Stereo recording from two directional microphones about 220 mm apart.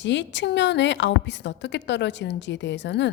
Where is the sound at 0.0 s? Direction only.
55° left (ahead or behind).